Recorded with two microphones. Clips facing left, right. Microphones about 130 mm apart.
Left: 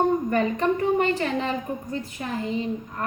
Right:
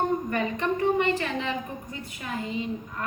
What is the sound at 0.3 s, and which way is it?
A woman's voice, 35° left (ahead or behind).